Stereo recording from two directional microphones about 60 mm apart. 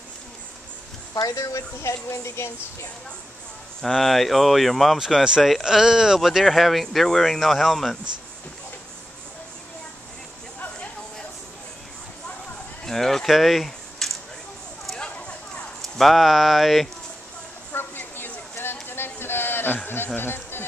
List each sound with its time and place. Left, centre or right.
1.1 s speech: left
1.4 s speech: left
3.9 s speech: centre
4.9 s speech: centre
12.8 s a sound: centre
15.0 s a sound: centre
15.8 s speech: centre
17.7 s a sound: left
20.2 s speech: left